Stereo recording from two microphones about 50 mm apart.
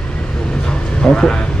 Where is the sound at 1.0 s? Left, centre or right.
Centre.